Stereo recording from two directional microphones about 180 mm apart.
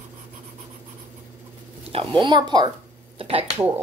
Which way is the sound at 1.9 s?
25° right (ahead or behind).